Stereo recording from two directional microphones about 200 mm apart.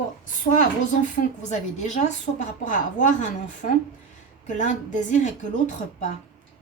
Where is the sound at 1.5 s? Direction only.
35° left (ahead or behind).